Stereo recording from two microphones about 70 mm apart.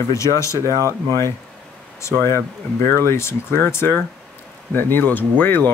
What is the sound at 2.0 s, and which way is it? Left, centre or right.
Speech, left.